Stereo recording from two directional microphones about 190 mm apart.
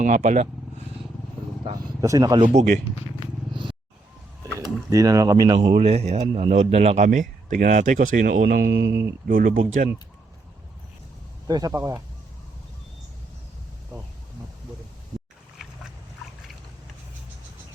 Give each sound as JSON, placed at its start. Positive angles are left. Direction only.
{"t": 0.0, "sound": "a man's voice", "side_deg": -40}
{"t": 1.6, "sound": "speech", "side_deg": -20}
{"t": 2.5, "sound": "a man's voice", "side_deg": -40}
{"t": 3.5, "sound": "vehicle", "side_deg": -25}
{"t": 4.5, "sound": "speech", "side_deg": -15}
{"t": 5.5, "sound": "a man's voice", "side_deg": -30}
{"t": 9.2, "sound": "speech", "side_deg": -45}
{"t": 11.4, "sound": "speech", "side_deg": -20}